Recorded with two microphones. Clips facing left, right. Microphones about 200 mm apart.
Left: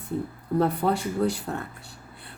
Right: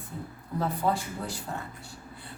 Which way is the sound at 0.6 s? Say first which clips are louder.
Left 4 dB; 65° left (ahead or behind).